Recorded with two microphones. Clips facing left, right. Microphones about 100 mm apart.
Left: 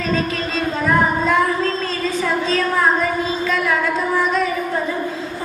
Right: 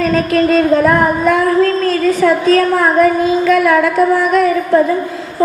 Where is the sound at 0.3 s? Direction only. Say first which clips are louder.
Right 12 dB; 60° right (ahead or behind).